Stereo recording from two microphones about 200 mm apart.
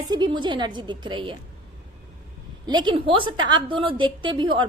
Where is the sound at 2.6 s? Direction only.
20° right (ahead or behind).